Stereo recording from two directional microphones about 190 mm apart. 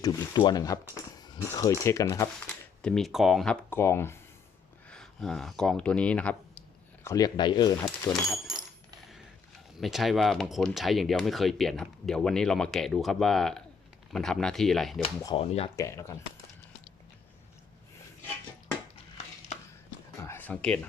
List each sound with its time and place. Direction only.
0.0 s speech: 20° left (ahead or behind)
2.8 s speech: centre (ahead or behind)
4.9 s speech: 5° left (ahead or behind)
7.0 s speech: 15° left (ahead or behind)
8.1 s speech: centre (ahead or behind)
9.8 s speech: centre (ahead or behind)
15.4 s speech: 30° left (ahead or behind)
15.7 s speech: 15° left (ahead or behind)
20.2 s a sound: 10° left (ahead or behind)